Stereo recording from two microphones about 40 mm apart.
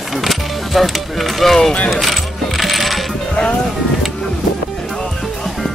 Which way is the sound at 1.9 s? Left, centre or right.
Centre.